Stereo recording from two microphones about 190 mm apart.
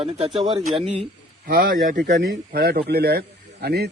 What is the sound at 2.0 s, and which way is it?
Speech, 65° right (ahead or behind).